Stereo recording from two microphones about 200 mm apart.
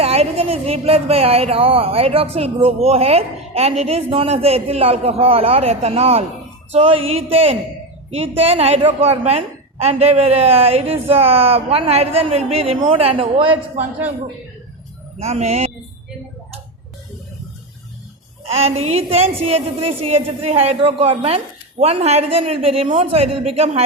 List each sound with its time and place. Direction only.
0.0 s a woman's voice: 30° right (ahead or behind)
15.2 s a woman's voice: 30° right (ahead or behind)
18.4 s a woman's voice: 30° right (ahead or behind)